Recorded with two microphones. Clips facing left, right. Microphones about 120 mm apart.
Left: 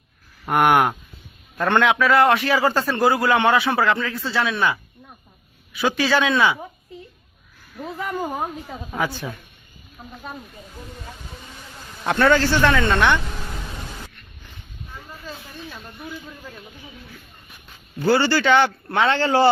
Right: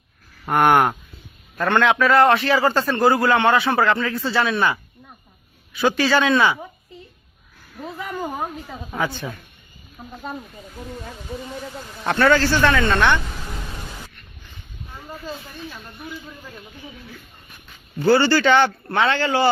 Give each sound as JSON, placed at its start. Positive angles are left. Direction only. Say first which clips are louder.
{"t": 0.4, "sound": "a man's voice", "louder": "right 1 dB", "side_deg": 5}
{"t": 1.5, "sound": "speech", "louder": "even", "side_deg": 15}
{"t": 2.0, "sound": "a man's voice", "louder": "right 1 dB", "side_deg": 5}
{"t": 7.8, "sound": "speech", "louder": "left 2 dB", "side_deg": 5}
{"t": 10.0, "sound": "speech", "louder": "right 2 dB", "side_deg": -10}
{"t": 12.3, "sound": "speech", "louder": "even", "side_deg": 15}
{"t": 15.3, "sound": "speech", "louder": "right 1 dB", "side_deg": 0}
{"t": 18.0, "sound": "speech", "louder": "right 2 dB", "side_deg": 10}
{"t": 19.1, "sound": "a man's voice", "louder": "left 2 dB", "side_deg": 30}